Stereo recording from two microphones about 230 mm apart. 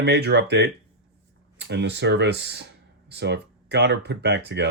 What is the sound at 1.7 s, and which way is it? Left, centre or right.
Speech, right.